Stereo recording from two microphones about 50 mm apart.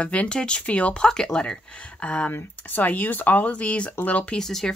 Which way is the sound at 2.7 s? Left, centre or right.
Left.